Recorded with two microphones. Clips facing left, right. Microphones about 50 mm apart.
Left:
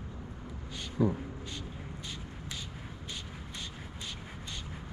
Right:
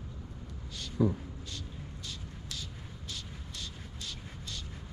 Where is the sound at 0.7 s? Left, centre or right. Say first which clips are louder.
Even; centre.